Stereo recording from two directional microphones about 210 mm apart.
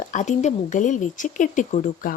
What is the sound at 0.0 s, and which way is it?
A woman's voice, 35° left (ahead or behind).